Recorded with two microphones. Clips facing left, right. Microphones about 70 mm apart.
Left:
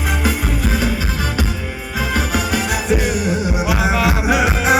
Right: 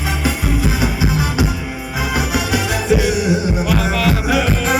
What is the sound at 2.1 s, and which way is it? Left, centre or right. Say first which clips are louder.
Music: right 1 dB; centre.